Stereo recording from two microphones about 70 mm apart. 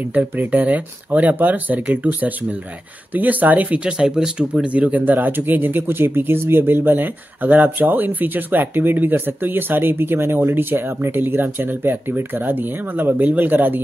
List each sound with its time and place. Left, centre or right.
0.1 s speech: right